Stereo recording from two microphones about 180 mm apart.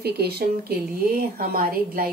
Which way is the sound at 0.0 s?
60° right (ahead or behind).